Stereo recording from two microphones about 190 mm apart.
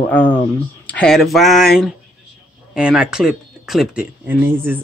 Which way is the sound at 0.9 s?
5° left (ahead or behind).